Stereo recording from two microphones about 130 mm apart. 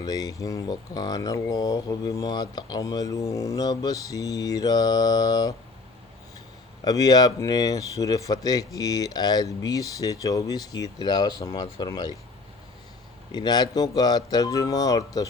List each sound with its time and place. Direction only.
0.0 s speech: 30° left (ahead or behind)
6.8 s speech: 30° left (ahead or behind)
13.3 s speech: 35° left (ahead or behind)